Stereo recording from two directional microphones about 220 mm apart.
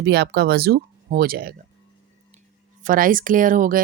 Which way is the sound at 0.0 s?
50° right (ahead or behind).